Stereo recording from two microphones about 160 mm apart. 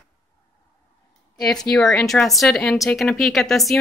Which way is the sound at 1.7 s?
5° left (ahead or behind).